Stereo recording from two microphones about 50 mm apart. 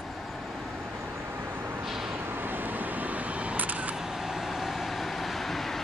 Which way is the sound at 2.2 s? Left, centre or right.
Right.